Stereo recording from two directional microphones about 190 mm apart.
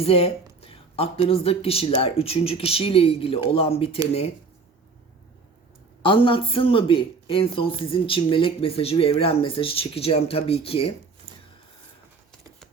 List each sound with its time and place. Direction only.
0.0 s speech: 30° left (ahead or behind)
6.0 s speech: 25° left (ahead or behind)